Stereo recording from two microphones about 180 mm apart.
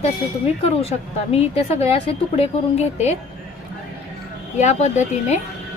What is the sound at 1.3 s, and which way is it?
Speech, 35° left (ahead or behind).